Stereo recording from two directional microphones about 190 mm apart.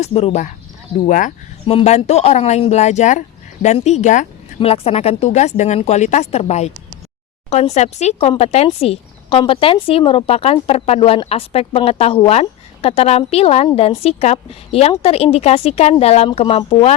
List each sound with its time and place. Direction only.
0.0 s a woman's voice: 35° left (ahead or behind)
1.6 s a woman's voice: 35° left (ahead or behind)